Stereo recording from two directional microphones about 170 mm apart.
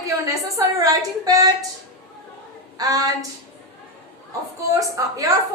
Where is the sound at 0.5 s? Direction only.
20° right (ahead or behind).